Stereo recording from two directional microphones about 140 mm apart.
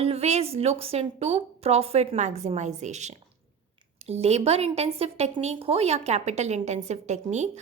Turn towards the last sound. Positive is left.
turn(degrees=-55)  # may be behind; listen again after turning